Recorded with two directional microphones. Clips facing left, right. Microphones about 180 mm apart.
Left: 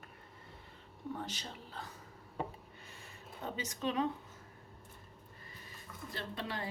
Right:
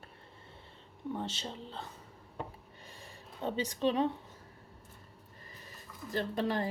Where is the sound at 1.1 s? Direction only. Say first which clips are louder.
Right 6 dB; 25° right (ahead or behind).